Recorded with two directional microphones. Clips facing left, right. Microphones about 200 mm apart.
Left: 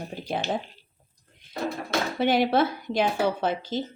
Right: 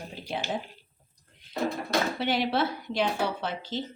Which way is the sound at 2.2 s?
50° left (ahead or behind).